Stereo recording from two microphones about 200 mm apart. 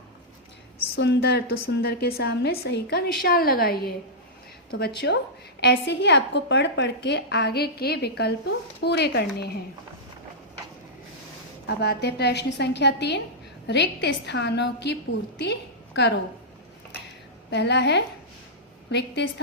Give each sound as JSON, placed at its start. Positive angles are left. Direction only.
{"t": 0.9, "sound": "a woman's voice", "side_deg": 60}
{"t": 5.0, "sound": "a woman's voice", "side_deg": 55}
{"t": 11.6, "sound": "a woman's voice", "side_deg": 55}
{"t": 15.9, "sound": "a woman's voice", "side_deg": 60}
{"t": 17.5, "sound": "a woman's voice", "side_deg": 60}